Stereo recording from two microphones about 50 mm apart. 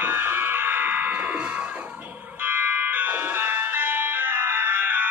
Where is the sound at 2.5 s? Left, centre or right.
Right.